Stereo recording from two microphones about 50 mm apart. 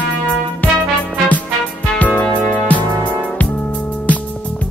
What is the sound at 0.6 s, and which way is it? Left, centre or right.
Music, left.